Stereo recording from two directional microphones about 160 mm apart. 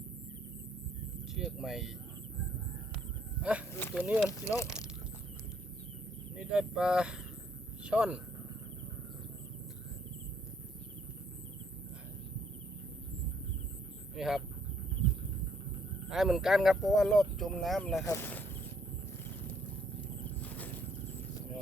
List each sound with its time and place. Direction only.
1.3 s speech: centre (ahead or behind)
3.4 s a sound: 10° left (ahead or behind)
3.9 s speech: 5° right (ahead or behind)
4.3 s speech: 20° left (ahead or behind)
6.3 s speech: 5° right (ahead or behind)
14.2 s speech: centre (ahead or behind)
16.0 s speech: centre (ahead or behind)
18.0 s speech: 15° left (ahead or behind)
20.4 s a sound: 10° left (ahead or behind)